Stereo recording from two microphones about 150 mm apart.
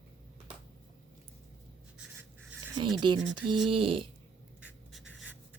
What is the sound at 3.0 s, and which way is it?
Speech, 30° right (ahead or behind).